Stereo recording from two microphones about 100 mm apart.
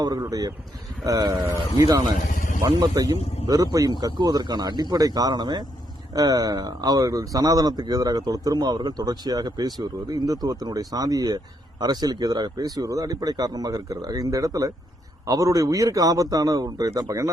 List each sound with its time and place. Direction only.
0.0 s speech: 40° right (ahead or behind)